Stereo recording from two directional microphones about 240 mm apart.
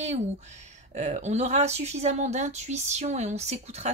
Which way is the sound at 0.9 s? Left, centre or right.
Right.